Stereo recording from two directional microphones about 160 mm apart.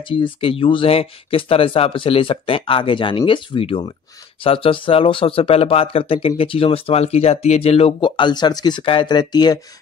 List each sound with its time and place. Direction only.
0.0 s speech: 35° left (ahead or behind)